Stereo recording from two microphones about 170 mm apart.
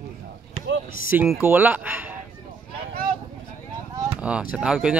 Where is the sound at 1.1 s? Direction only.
5° right (ahead or behind).